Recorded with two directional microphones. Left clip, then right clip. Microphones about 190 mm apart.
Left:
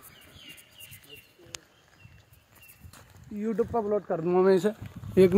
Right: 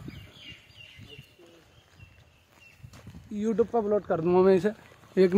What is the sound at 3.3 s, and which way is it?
Speech, 25° right (ahead or behind).